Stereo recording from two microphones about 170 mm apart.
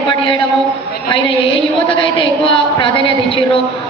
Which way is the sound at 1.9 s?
30° left (ahead or behind).